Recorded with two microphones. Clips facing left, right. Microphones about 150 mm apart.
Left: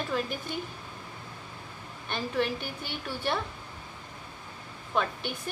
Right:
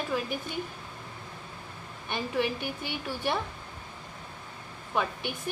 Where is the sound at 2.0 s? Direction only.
10° right (ahead or behind).